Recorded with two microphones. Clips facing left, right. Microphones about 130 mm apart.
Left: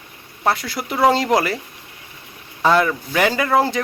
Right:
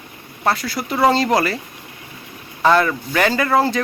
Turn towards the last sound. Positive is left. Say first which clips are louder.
# right 1 dB
turn(degrees=15)  # may be behind; listen again after turning